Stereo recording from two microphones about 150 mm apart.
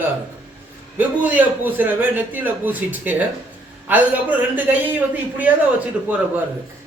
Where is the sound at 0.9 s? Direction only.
10° right (ahead or behind).